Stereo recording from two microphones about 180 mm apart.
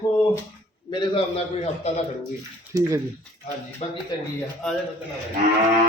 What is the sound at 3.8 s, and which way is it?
Speech, 35° left (ahead or behind).